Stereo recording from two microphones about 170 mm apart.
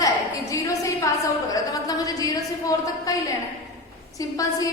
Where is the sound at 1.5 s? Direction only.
20° left (ahead or behind).